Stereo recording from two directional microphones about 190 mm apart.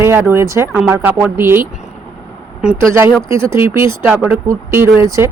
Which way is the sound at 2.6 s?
Centre (ahead or behind).